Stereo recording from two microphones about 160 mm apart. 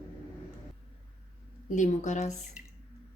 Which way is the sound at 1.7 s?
50° left (ahead or behind).